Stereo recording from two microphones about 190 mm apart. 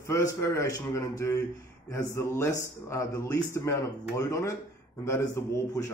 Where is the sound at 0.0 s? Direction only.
15° left (ahead or behind).